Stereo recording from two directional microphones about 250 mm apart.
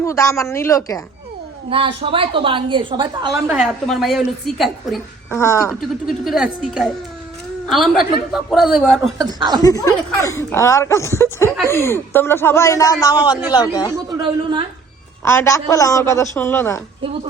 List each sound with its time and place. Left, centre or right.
0.0 s speech: centre
1.7 s a woman's voice: right
3.4 s a woman's voice: centre
5.3 s speech: centre
5.8 s a woman's voice: centre
9.1 s speech: centre
9.6 s speech: centre
15.2 s speech: centre